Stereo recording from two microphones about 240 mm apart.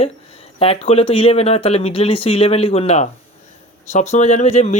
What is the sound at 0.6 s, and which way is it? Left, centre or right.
Speech, left.